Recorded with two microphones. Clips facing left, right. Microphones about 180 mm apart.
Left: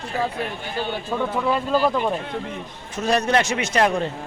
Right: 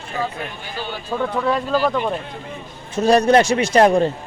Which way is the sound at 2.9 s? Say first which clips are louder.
Right 7 dB; 35° right (ahead or behind).